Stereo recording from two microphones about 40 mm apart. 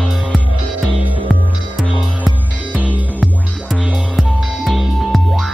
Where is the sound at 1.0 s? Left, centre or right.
Right.